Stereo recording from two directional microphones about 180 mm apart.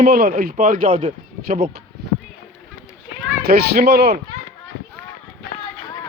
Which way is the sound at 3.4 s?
60° right (ahead or behind).